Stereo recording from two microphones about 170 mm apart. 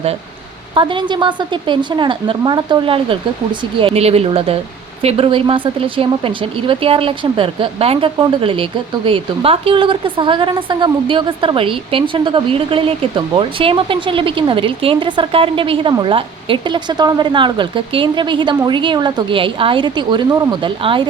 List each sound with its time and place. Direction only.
0.7 s a woman's voice: 30° right (ahead or behind)